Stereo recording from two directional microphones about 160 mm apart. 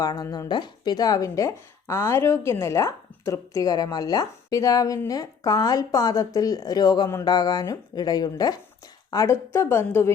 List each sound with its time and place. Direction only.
0.0 s a woman's voice: 25° left (ahead or behind)